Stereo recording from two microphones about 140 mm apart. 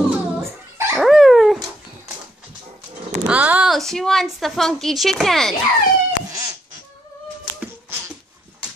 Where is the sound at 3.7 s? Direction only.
Centre (ahead or behind).